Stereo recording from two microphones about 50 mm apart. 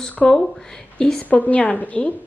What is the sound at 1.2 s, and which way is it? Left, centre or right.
Speech, left.